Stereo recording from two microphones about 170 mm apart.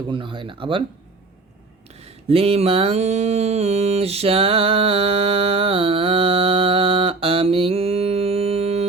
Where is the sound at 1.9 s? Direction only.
35° right (ahead or behind).